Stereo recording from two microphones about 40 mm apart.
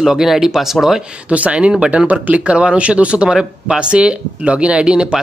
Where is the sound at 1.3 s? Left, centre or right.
Right.